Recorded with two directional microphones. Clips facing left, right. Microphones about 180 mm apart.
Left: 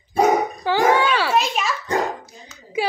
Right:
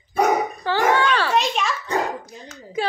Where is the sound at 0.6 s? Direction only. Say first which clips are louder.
Left 2 dB; 10° left (ahead or behind).